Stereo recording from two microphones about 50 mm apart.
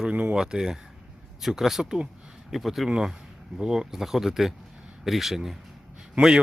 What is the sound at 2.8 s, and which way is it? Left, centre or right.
Speech, centre.